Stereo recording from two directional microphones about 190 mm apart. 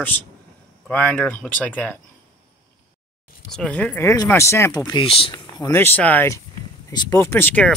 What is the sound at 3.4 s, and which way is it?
Speech, 5° left (ahead or behind).